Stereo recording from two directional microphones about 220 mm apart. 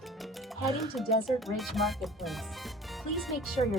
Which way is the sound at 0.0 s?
Centre (ahead or behind).